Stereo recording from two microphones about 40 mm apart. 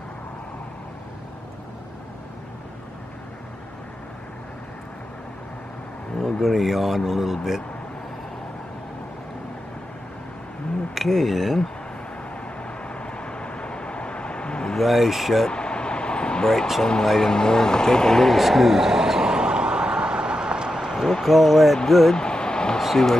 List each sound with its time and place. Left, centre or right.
6.4 s speech: centre
11.0 s speech: centre
12.8 s vehicle: left
14.8 s speech: centre
15.5 s vehicle: left
17.0 s speech: centre
17.3 s a sound: centre; by 20.9 s right
21.1 s speech: centre
22.1 s a sound: left
22.8 s a sound: centre